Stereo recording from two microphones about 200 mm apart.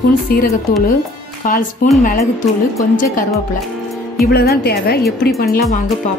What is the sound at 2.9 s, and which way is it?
Speech, 45° left (ahead or behind).